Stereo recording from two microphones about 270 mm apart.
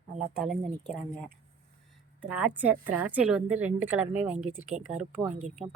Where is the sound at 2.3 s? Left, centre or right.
Centre.